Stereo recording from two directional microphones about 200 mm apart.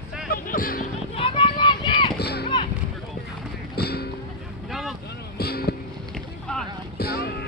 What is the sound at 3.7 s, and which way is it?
Music, 55° left (ahead or behind).